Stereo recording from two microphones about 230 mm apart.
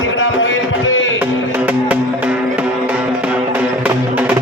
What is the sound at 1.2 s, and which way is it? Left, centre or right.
Music, centre.